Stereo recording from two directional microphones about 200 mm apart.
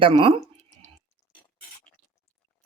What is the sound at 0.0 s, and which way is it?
Speech, 25° right (ahead or behind).